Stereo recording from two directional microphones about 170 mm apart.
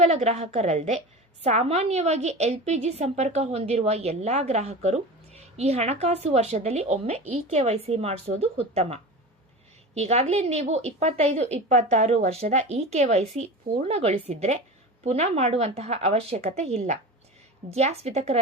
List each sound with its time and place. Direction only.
0.0 s a woman's voice: 40° right (ahead or behind)